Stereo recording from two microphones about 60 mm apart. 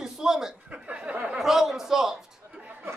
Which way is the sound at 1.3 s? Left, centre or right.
Centre.